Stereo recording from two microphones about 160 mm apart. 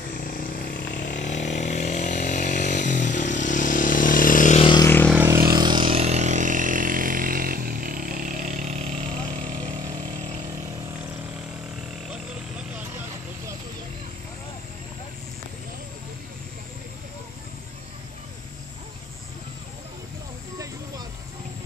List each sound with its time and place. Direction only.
0.2 s chainsaw: 60° left (ahead or behind)
4.6 s vehicle: 30° left (ahead or behind)
4.8 s vehicle: 15° left (ahead or behind)
5.1 s vehicle: 15° right (ahead or behind)
5.5 s vehicle: 25° right (ahead or behind); by 9.6 s 45° right (ahead or behind)
12.1 s a sound: 5° right (ahead or behind)